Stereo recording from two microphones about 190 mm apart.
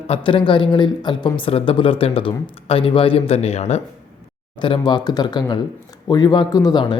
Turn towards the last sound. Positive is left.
turn(degrees=25)  # may be behind; listen again after turning